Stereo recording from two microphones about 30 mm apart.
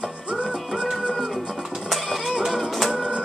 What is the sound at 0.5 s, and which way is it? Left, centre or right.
Music, right.